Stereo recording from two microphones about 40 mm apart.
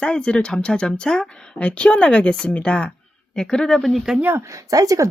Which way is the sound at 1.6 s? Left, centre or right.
Left.